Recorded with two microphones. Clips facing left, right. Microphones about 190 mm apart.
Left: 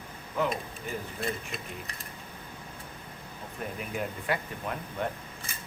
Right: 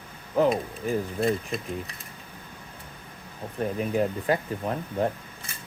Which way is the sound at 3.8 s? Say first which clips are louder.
Right 10 dB; 35° right (ahead or behind).